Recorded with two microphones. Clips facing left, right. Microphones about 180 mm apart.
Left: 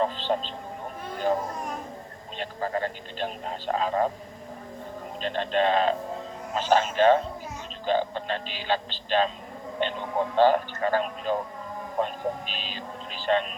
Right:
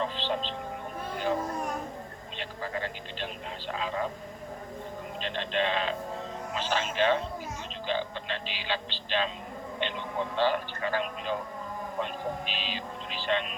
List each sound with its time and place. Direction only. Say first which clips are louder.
0.0 s speech: left 5 dB; 45° left (ahead or behind)
5.2 s speech: left 6 dB; 45° left (ahead or behind)
13.3 s speech: left 5 dB; 40° left (ahead or behind)